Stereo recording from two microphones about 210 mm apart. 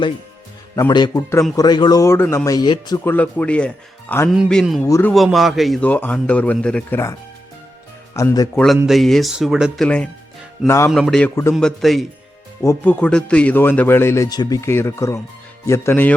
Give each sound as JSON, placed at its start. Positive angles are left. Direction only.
{"t": 0.8, "sound": "a man's voice", "side_deg": 20}
{"t": 4.9, "sound": "speech", "side_deg": 15}
{"t": 5.1, "sound": "a man's voice", "side_deg": 0}
{"t": 8.5, "sound": "a man's voice", "side_deg": 0}
{"t": 10.9, "sound": "a man's voice", "side_deg": 0}